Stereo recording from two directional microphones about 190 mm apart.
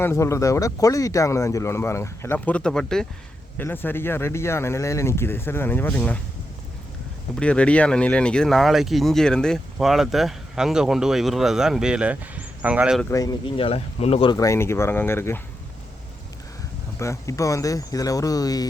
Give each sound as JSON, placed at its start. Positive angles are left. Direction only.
{"t": 0.0, "sound": "speech", "side_deg": 15}
{"t": 7.3, "sound": "speech", "side_deg": 5}
{"t": 13.0, "sound": "speech", "side_deg": 15}
{"t": 14.3, "sound": "speech", "side_deg": 15}
{"t": 17.0, "sound": "speech", "side_deg": 15}